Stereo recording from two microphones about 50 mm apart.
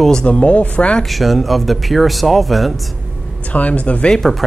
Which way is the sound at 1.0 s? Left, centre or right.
Centre.